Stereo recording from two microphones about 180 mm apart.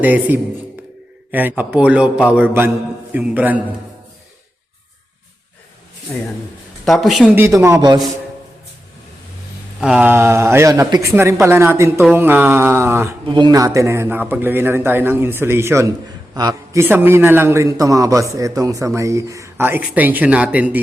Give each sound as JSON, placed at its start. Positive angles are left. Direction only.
{"t": 0.0, "sound": "a man's voice", "side_deg": -10}
{"t": 6.8, "sound": "speech", "side_deg": 0}
{"t": 7.3, "sound": "a man's voice", "side_deg": -15}
{"t": 9.8, "sound": "a man's voice", "side_deg": -5}
{"t": 13.2, "sound": "a man's voice", "side_deg": -25}